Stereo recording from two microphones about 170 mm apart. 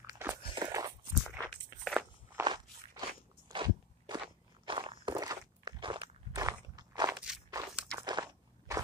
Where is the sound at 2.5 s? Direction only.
25° right (ahead or behind).